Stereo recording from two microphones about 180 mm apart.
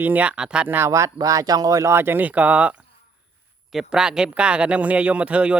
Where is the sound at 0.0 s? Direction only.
10° right (ahead or behind).